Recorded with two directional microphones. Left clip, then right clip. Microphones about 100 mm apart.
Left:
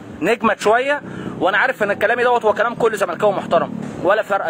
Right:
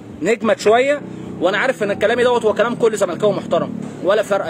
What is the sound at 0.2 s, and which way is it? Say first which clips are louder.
Speech: right 1 dB; 25° right (ahead or behind).